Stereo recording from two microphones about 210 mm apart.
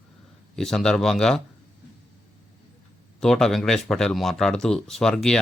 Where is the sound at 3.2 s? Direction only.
Centre (ahead or behind).